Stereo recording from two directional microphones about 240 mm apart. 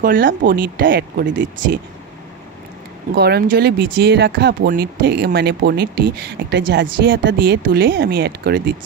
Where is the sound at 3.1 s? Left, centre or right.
Right.